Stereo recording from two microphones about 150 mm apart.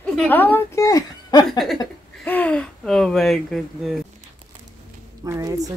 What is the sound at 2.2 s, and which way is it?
Speech, 10° left (ahead or behind).